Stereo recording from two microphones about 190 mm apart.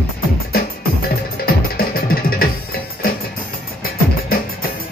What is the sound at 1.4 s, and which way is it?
Music, 50° left (ahead or behind).